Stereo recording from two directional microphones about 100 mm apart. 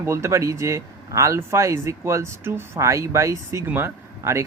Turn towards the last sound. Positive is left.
turn(degrees=-30)  # may be behind; listen again after turning